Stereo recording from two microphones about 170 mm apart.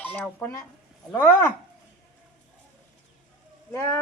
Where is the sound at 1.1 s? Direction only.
10° left (ahead or behind).